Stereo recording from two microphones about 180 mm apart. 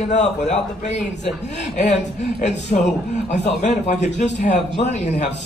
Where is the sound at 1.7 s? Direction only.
40° left (ahead or behind).